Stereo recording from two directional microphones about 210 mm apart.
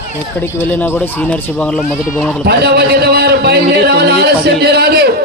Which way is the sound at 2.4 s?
50° right (ahead or behind).